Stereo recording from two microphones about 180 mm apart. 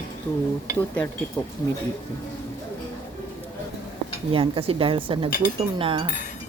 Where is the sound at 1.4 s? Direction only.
20° left (ahead or behind).